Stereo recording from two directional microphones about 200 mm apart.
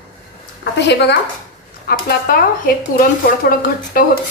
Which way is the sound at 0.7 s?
60° left (ahead or behind).